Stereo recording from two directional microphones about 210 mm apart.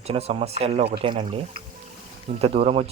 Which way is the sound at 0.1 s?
30° right (ahead or behind).